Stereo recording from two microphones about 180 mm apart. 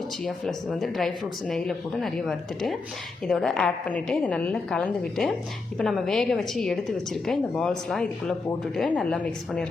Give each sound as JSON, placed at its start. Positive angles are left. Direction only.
{"t": 0.3, "sound": "a woman's voice", "side_deg": 0}